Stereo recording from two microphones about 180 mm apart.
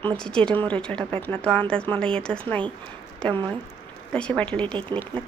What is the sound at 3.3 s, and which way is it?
Speech, 25° right (ahead or behind).